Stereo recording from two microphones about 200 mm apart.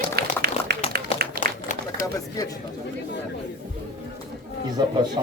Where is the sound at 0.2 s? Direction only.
55° right (ahead or behind).